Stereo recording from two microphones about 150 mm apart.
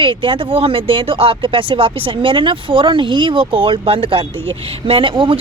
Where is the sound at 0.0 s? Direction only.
35° right (ahead or behind).